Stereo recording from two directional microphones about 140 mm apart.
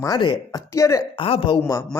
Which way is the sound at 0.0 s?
30° left (ahead or behind).